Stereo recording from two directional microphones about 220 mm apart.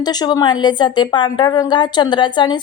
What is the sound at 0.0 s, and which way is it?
A woman's voice, 20° left (ahead or behind).